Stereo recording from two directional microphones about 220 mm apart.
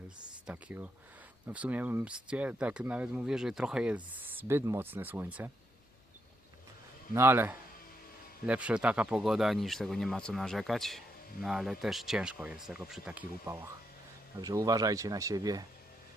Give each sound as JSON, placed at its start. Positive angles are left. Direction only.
{"t": 0.4, "sound": "speech", "side_deg": -5}
{"t": 7.1, "sound": "speech", "side_deg": -10}